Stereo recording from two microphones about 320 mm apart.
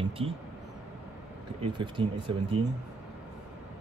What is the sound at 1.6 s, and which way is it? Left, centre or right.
Speech, centre.